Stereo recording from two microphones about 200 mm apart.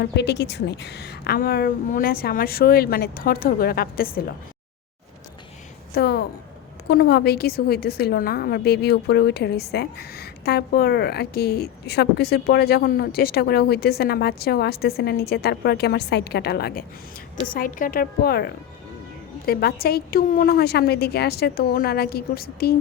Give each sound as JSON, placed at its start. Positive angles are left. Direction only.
{"t": 0.0, "sound": "a woman's voice", "side_deg": 55}
{"t": 5.9, "sound": "a woman's voice", "side_deg": 55}